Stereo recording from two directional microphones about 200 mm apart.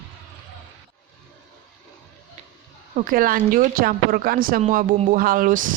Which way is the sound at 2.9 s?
45° right (ahead or behind).